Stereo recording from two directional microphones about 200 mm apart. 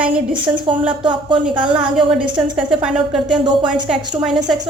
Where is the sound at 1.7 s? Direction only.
5° right (ahead or behind).